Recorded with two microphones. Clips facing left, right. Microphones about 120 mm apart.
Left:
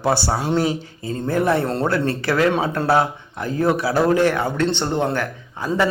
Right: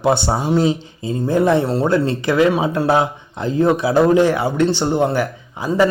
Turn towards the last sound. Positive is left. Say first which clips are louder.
# right 4 dB
turn(degrees=-10)  # may be behind; listen again after turning